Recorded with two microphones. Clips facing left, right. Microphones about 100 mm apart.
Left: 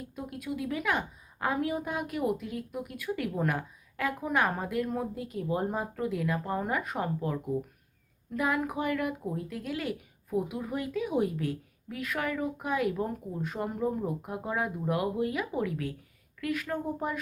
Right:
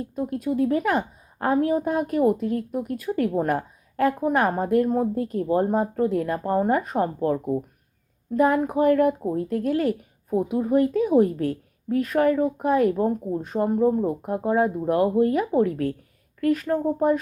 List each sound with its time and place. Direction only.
0.0 s speech: 35° right (ahead or behind)